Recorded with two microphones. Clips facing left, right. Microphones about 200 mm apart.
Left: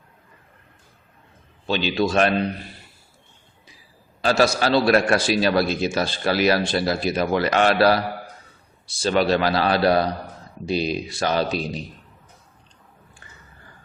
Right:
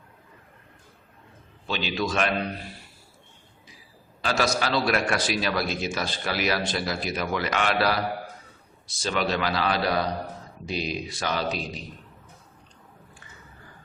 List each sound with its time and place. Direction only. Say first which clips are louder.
1.6 s a man's voice: left 6 dB; 30° left (ahead or behind)
4.2 s a man's voice: left 6 dB; 30° left (ahead or behind)